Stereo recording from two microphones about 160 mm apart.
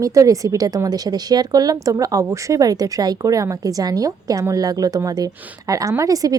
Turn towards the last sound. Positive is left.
turn(degrees=-20)  # may be behind; listen again after turning